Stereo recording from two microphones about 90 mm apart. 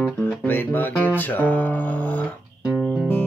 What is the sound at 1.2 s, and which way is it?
Music, 20° left (ahead or behind).